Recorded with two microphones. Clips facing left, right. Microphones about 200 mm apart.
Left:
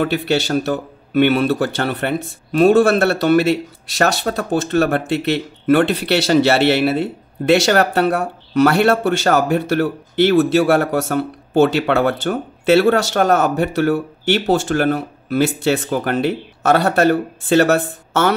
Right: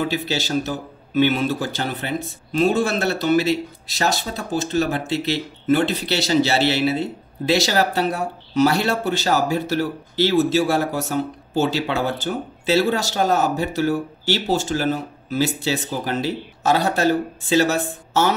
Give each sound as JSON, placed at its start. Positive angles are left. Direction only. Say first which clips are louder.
{"t": 0.0, "sound": "speech", "louder": "left 6 dB", "side_deg": 60}